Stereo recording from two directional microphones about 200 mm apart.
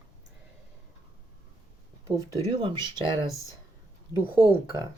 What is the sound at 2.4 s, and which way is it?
Speech, 25° right (ahead or behind).